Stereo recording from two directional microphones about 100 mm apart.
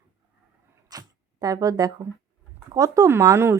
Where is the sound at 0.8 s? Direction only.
40° right (ahead or behind).